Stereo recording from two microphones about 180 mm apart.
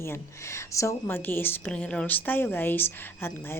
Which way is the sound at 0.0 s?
15° left (ahead or behind).